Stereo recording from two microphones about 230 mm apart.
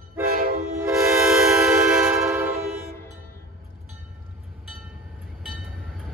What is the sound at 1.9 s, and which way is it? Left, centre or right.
Train, centre.